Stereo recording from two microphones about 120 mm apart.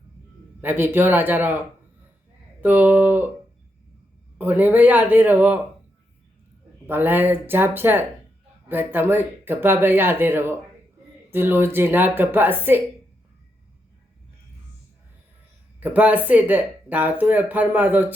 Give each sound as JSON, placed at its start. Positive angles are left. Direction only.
{"t": 0.6, "sound": "speech", "side_deg": -15}
{"t": 4.4, "sound": "speech", "side_deg": -15}
{"t": 6.8, "sound": "speech", "side_deg": -15}
{"t": 15.8, "sound": "speech", "side_deg": -15}